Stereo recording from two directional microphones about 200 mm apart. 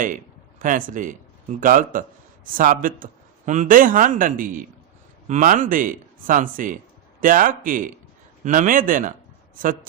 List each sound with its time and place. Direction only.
0.6 s a man's voice: 40° right (ahead or behind)